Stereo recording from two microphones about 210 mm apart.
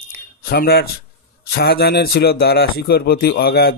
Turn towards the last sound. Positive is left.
turn(degrees=50)  # may be behind; listen again after turning